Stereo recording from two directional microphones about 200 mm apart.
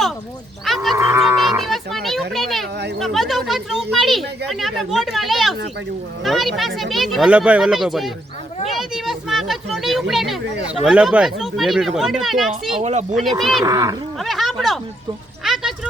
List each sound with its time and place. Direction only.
0.6 s livestock: centre (ahead or behind)
0.9 s livestock: 15° right (ahead or behind)
1.4 s livestock: centre (ahead or behind)
3.0 s speech: centre (ahead or behind)
8.6 s a sound: centre (ahead or behind)
10.8 s speech: 5° right (ahead or behind)
12.8 s speech: 35° right (ahead or behind)
13.4 s speech: centre (ahead or behind)
13.7 s speech: 15° right (ahead or behind)
14.2 s a sound: centre (ahead or behind)